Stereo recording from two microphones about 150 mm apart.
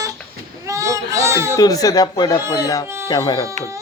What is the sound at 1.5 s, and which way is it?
Speech, 25° left (ahead or behind).